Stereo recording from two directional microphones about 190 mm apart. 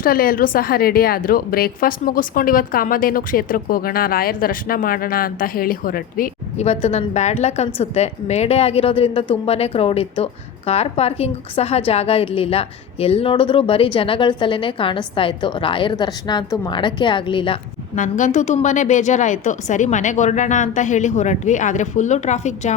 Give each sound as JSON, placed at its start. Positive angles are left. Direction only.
{"t": 0.0, "sound": "a woman's voice", "side_deg": 50}
{"t": 6.7, "sound": "a woman's voice", "side_deg": 35}
{"t": 17.9, "sound": "a woman's voice", "side_deg": 40}